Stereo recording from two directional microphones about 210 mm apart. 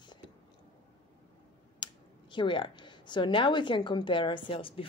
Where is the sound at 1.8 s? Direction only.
25° left (ahead or behind).